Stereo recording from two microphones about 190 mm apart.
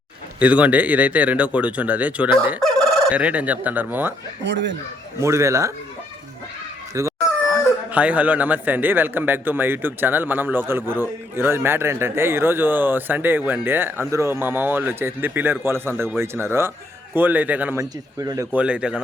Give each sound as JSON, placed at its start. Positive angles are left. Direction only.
{"t": 0.3, "sound": "a man's voice", "side_deg": -5}
{"t": 2.7, "sound": "fowl", "side_deg": -5}
{"t": 4.4, "sound": "speech", "side_deg": -70}
{"t": 5.2, "sound": "a man's voice", "side_deg": -15}
{"t": 6.9, "sound": "a man's voice", "side_deg": -15}
{"t": 18.5, "sound": "a man's voice", "side_deg": -5}